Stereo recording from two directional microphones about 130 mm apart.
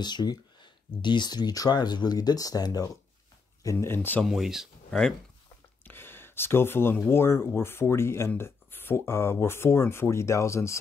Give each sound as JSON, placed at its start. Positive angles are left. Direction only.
{"t": 0.0, "sound": "speech", "side_deg": 35}
{"t": 3.6, "sound": "speech", "side_deg": 20}
{"t": 4.2, "sound": "speech", "side_deg": -5}
{"t": 5.9, "sound": "speech", "side_deg": 15}